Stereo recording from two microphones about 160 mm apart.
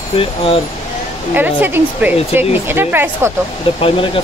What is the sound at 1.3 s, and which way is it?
Speech, 10° right (ahead or behind).